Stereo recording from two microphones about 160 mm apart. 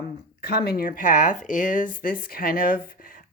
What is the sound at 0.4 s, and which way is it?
Speech, 75° left (ahead or behind).